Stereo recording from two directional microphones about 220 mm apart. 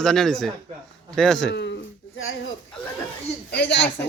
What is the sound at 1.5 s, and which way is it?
Speech, 50° left (ahead or behind).